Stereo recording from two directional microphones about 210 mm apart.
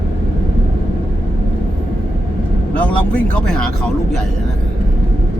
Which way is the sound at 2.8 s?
5° left (ahead or behind).